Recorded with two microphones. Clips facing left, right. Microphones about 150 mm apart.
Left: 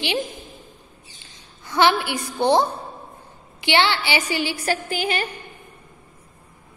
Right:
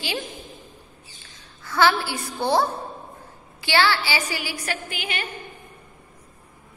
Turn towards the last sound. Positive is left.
turn(degrees=35)  # may be behind; listen again after turning